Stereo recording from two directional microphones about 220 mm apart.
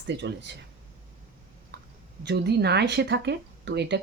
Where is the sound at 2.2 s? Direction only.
50° right (ahead or behind).